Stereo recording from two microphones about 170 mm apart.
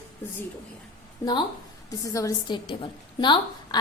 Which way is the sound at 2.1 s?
20° left (ahead or behind).